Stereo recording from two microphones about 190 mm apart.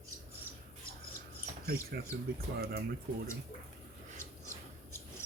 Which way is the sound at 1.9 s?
55° right (ahead or behind).